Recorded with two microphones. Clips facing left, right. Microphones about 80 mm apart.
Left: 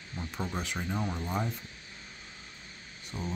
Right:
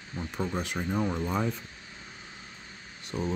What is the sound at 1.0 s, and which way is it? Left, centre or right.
Speech, right.